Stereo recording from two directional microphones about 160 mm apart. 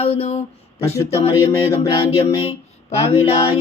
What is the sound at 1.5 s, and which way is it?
Music, 20° left (ahead or behind).